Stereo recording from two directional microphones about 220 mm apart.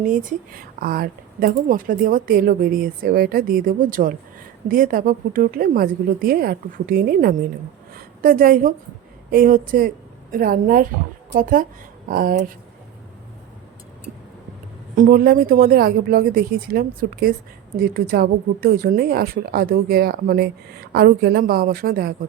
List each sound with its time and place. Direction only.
0.0 s a woman's voice: 35° right (ahead or behind)
14.9 s speech: 40° right (ahead or behind)